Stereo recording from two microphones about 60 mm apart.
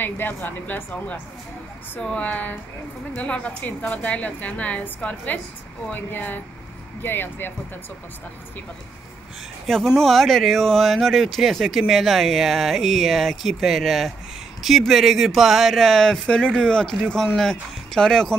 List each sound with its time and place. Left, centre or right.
0.0 s a woman's voice: left
2.0 s a woman's voice: centre; by 7.5 s left
9.9 s speech: centre